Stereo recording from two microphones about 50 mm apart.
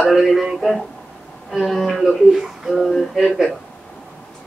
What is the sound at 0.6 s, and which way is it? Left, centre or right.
A woman's voice, centre.